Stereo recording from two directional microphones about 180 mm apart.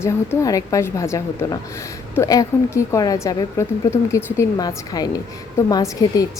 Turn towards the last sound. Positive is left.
turn(degrees=20)  # may be behind; listen again after turning